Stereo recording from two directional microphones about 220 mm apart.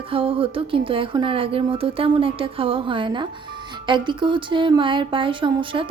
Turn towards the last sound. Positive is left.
turn(degrees=-20)  # may be behind; listen again after turning